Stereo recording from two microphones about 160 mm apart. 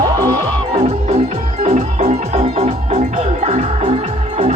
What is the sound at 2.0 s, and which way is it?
Music, 40° right (ahead or behind).